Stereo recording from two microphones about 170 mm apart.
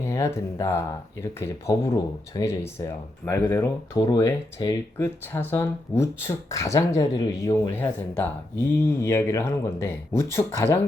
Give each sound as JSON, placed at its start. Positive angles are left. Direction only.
{"t": 0.0, "sound": "speech", "side_deg": 15}